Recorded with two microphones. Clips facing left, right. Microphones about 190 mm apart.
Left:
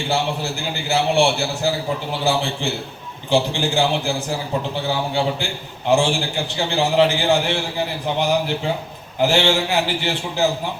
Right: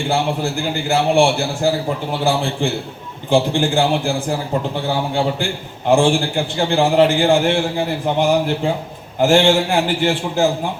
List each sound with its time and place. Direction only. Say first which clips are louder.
0.9 s a man's voice: right 3 dB; 50° right (ahead or behind)
5.9 s a man's voice: right 4 dB; 50° right (ahead or behind)